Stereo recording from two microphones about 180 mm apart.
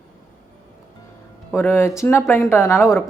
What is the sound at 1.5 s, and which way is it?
A woman's voice, 15° left (ahead or behind).